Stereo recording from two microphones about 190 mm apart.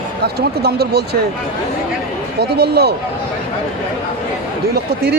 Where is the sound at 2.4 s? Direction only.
55° right (ahead or behind).